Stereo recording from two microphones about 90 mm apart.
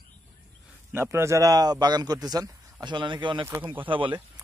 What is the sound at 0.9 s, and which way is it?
A man's voice, 25° right (ahead or behind).